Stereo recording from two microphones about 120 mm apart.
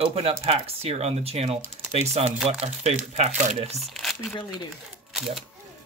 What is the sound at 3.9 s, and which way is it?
Speech, centre (ahead or behind).